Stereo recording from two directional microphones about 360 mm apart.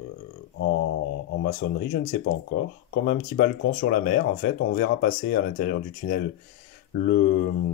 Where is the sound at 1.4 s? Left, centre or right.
Left.